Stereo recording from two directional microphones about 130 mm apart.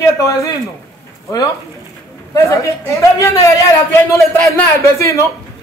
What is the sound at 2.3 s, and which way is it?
A man's voice, 25° left (ahead or behind).